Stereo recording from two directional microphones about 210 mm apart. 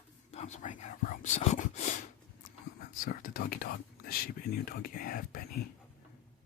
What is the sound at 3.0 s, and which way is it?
Whispering, 45° left (ahead or behind).